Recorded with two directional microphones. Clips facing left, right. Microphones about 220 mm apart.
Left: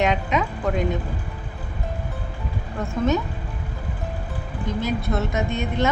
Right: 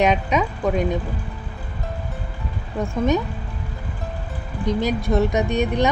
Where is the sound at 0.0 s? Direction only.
15° right (ahead or behind).